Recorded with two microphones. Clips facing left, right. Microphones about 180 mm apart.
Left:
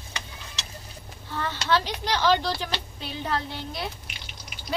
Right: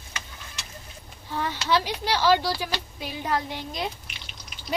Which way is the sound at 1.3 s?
10° right (ahead or behind).